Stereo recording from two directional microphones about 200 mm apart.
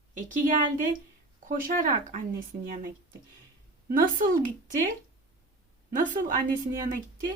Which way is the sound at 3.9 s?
45° right (ahead or behind).